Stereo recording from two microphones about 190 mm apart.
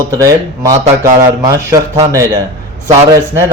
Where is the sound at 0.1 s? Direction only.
15° right (ahead or behind).